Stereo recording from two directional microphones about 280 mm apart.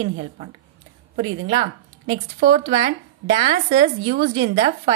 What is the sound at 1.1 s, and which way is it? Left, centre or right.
A woman's voice, centre.